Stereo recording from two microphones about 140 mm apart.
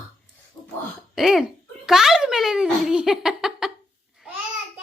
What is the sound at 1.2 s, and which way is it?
A child's voice, 5° right (ahead or behind).